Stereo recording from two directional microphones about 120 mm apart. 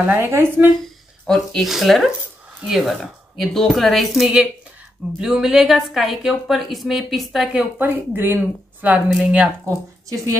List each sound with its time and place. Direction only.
0.1 s speech: 20° right (ahead or behind)
1.2 s speech: 5° left (ahead or behind)
7.8 s a woman's voice: 15° right (ahead or behind)
9.7 s speech: 25° right (ahead or behind)